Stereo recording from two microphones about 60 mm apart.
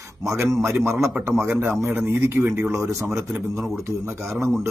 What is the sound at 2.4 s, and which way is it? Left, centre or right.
Speech, centre.